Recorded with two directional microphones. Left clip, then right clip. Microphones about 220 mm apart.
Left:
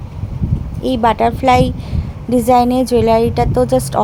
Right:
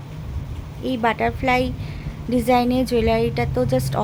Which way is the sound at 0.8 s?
25° left (ahead or behind).